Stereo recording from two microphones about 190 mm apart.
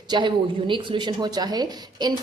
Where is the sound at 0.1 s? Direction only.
25° right (ahead or behind).